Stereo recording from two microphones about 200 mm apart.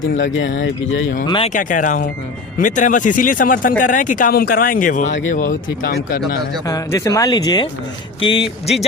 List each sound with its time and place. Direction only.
0.0 s speech: 70° left (ahead or behind)
1.5 s speech: 40° left (ahead or behind)
6.7 s speech: 15° left (ahead or behind)